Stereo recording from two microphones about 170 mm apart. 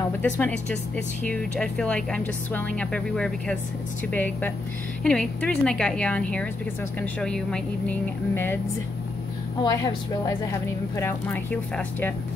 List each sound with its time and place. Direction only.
0.2 s a woman's voice: 10° left (ahead or behind)
9.6 s a woman's voice: 20° left (ahead or behind)